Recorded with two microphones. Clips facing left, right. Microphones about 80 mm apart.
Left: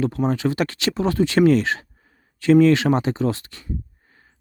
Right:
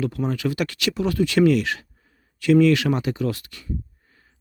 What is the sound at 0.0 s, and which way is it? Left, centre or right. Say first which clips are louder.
Speech: left 3 dB; left.